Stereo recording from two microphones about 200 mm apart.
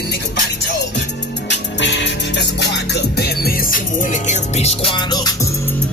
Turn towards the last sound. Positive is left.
turn(degrees=15)  # may be behind; listen again after turning